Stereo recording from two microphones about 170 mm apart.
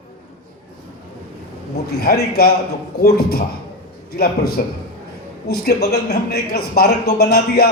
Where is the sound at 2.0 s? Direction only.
65° left (ahead or behind).